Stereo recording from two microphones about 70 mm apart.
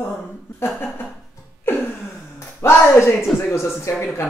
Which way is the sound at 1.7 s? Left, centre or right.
Left.